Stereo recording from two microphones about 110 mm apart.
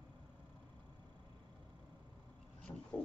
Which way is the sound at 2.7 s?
25° left (ahead or behind).